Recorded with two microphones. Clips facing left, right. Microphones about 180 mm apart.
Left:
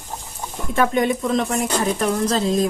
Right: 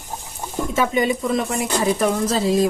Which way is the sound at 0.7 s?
Centre (ahead or behind).